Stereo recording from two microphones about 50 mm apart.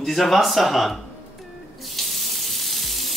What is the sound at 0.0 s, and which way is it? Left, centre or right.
Speech, centre.